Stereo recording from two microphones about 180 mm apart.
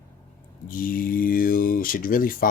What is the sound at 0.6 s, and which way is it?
Speech, 50° left (ahead or behind).